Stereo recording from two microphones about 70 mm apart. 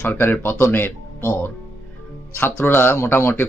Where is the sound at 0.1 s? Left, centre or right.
Left.